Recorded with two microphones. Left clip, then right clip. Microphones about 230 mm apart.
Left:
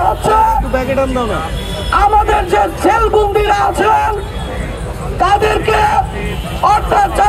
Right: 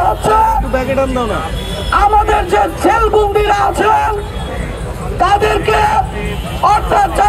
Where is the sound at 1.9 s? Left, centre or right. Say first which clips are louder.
Even; right.